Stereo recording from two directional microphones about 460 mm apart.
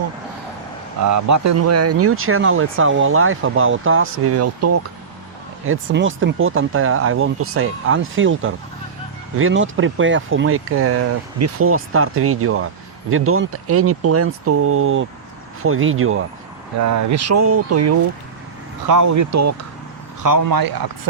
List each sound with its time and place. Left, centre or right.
1.0 s speech: right
20.2 s a man's voice: right